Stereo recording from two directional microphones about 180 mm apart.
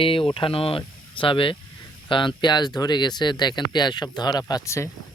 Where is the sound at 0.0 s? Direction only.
30° left (ahead or behind).